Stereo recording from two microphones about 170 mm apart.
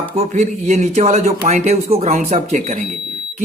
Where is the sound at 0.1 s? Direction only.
45° right (ahead or behind).